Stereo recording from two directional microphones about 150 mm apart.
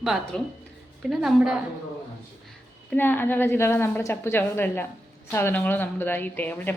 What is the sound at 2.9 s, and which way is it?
A woman's voice, 15° left (ahead or behind).